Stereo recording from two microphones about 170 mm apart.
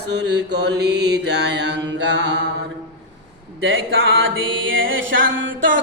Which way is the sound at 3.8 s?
90° right.